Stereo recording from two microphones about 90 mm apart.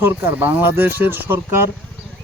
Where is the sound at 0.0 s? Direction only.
25° right (ahead or behind).